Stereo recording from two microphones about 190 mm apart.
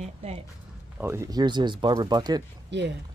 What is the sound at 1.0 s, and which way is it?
Speech, 15° right (ahead or behind).